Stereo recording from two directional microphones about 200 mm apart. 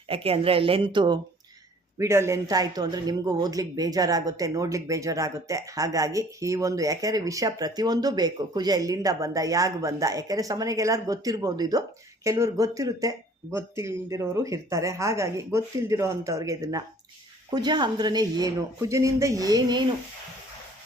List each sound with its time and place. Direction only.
0.1 s speech: 30° right (ahead or behind)